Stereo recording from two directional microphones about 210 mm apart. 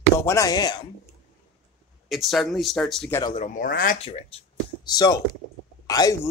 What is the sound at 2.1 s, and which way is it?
Speech, centre (ahead or behind).